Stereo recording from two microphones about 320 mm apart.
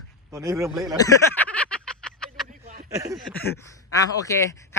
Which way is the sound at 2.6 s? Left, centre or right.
Right.